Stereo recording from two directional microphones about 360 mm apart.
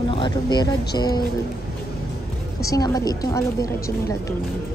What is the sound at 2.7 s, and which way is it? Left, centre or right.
Speech, centre.